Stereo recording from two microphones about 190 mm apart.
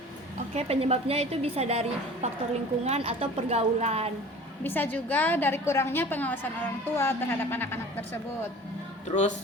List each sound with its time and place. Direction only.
0.5 s a woman's voice: 35° right (ahead or behind)
4.6 s a woman's voice: 10° left (ahead or behind)